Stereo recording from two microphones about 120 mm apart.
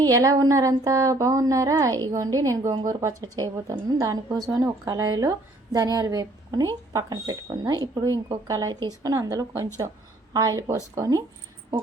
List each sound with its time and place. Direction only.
0.0 s speech: 30° right (ahead or behind)